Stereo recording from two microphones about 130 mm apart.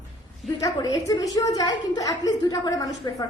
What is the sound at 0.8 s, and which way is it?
A woman's voice, 30° left (ahead or behind).